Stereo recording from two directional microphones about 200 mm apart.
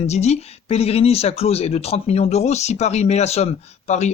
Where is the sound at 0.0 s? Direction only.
35° left (ahead or behind).